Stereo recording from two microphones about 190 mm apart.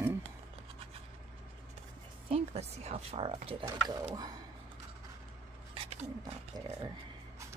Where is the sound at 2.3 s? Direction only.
35° right (ahead or behind).